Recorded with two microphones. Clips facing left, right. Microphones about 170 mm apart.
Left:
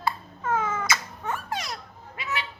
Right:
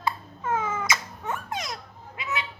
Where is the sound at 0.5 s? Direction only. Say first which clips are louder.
Left 1 dB; 15° right (ahead or behind).